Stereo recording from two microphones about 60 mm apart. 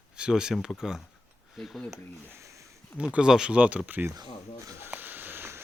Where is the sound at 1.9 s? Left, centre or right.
Right.